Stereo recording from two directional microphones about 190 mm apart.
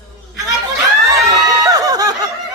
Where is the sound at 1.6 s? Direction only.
20° right (ahead or behind).